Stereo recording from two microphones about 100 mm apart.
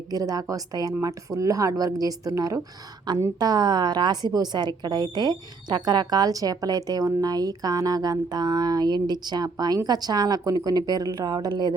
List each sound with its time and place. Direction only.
0.1 s speech: 40° right (ahead or behind)